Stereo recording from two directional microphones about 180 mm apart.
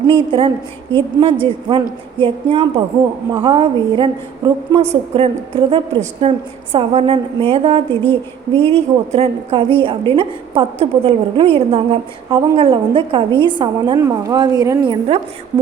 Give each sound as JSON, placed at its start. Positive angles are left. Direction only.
{"t": 0.1, "sound": "a woman's voice", "side_deg": -30}
{"t": 4.8, "sound": "a woman's voice", "side_deg": -35}